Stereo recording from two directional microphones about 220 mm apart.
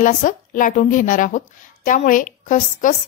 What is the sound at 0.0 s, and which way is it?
A woman's voice, 35° left (ahead or behind).